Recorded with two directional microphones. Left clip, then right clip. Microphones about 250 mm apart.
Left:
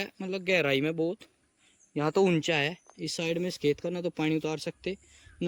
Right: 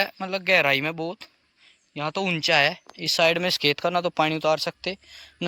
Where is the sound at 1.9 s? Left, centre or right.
Centre.